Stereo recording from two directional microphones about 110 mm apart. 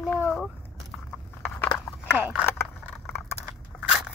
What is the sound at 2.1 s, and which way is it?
Speech, 15° right (ahead or behind).